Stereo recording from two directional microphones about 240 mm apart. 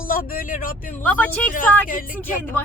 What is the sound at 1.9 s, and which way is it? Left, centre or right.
Speech, left.